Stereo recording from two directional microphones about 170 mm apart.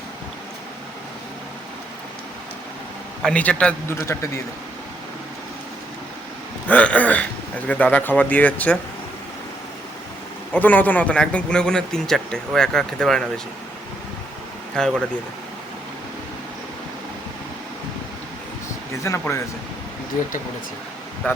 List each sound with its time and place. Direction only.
3.2 s speech: 5° left (ahead or behind)
6.7 s speech: 10° left (ahead or behind)
10.5 s a man's voice: 10° left (ahead or behind)
14.8 s a man's voice: centre (ahead or behind)
19.0 s speech: 15° left (ahead or behind)